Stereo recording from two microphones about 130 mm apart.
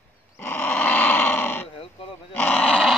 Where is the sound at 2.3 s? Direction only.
10° left (ahead or behind).